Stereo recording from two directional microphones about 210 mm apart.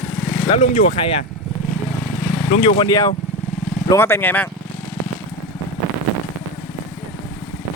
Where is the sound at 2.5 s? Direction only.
30° left (ahead or behind).